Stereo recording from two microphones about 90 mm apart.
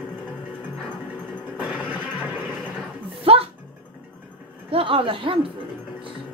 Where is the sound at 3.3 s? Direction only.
90° right.